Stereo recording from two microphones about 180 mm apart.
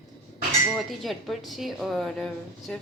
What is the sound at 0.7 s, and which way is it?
Speech, centre (ahead or behind).